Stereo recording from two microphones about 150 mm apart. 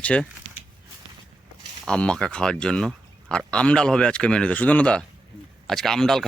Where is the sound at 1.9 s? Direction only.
5° left (ahead or behind).